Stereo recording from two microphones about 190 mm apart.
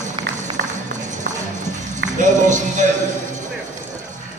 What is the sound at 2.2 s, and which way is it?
Music, 40° right (ahead or behind).